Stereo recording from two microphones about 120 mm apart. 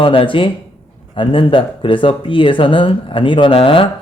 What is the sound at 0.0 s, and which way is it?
Speech, 45° left (ahead or behind).